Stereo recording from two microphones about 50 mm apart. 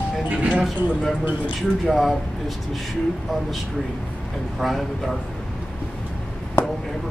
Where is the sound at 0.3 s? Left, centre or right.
Right.